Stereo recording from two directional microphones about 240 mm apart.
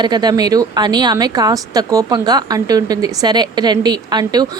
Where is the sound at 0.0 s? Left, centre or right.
Centre.